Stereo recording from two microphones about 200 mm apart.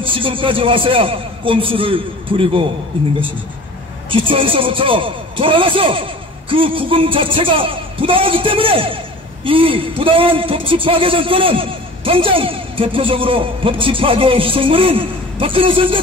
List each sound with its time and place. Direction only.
0.0 s speech: 25° right (ahead or behind)
4.1 s speech: 25° right (ahead or behind)